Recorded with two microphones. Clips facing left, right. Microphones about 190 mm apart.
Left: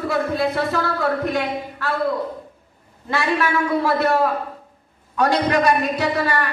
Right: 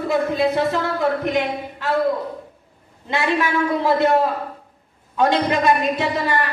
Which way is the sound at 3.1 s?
20° right (ahead or behind).